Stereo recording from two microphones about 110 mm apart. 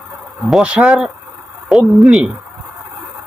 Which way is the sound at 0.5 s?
10° right (ahead or behind).